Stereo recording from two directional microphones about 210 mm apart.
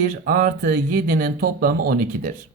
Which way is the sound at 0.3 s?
45° right (ahead or behind).